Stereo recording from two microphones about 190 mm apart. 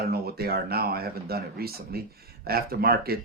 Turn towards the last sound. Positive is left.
turn(degrees=-55)  # may be behind; listen again after turning